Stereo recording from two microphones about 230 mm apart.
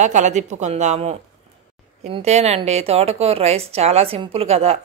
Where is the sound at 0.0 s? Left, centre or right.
Right.